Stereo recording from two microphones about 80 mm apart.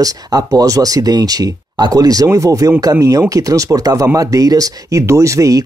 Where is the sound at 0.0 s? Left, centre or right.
Right.